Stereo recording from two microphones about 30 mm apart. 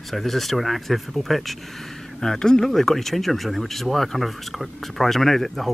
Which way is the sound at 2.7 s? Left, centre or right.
Centre.